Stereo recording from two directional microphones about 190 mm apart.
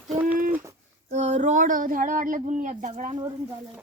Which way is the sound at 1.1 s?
35° right (ahead or behind).